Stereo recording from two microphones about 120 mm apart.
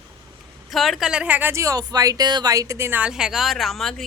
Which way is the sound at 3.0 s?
5° right (ahead or behind).